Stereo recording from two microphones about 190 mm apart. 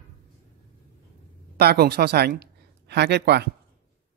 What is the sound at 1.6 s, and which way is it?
Speech, 55° right (ahead or behind).